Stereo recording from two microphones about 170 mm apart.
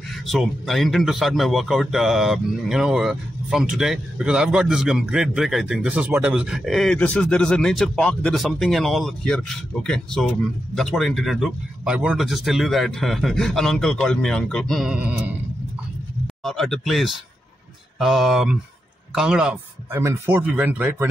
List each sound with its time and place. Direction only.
0.1 s a man's voice: centre (ahead or behind)
16.4 s a man's voice: centre (ahead or behind)
19.9 s speech: 15° right (ahead or behind)